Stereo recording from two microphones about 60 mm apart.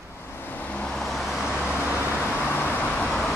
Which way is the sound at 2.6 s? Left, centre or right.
Left.